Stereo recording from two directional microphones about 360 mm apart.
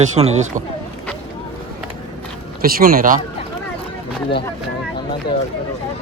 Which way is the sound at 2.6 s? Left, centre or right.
Right.